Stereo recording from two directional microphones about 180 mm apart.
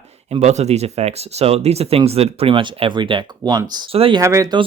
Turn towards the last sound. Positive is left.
turn(degrees=-20)  # may be behind; listen again after turning